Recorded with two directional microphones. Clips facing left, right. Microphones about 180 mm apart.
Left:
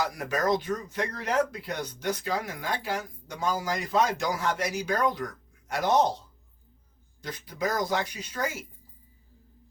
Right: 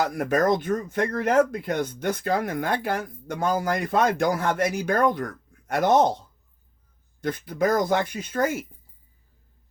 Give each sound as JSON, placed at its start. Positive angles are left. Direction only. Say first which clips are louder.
{"t": 0.0, "sound": "speech", "louder": "right 6 dB", "side_deg": -55}
{"t": 7.2, "sound": "speech", "louder": "right 8 dB", "side_deg": -55}